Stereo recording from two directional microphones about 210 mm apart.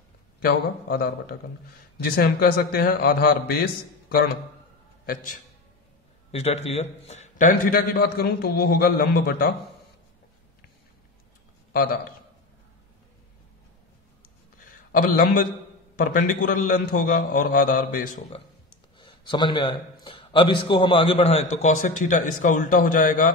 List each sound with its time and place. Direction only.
0.4 s a man's voice: 45° left (ahead or behind)
6.3 s a man's voice: 30° left (ahead or behind); by 9.5 s 45° left (ahead or behind)
14.6 s a sound: 40° left (ahead or behind)
16.0 s a man's voice: 40° left (ahead or behind)
18.9 s a man's voice: 20° left (ahead or behind); by 23.2 s 40° left (ahead or behind)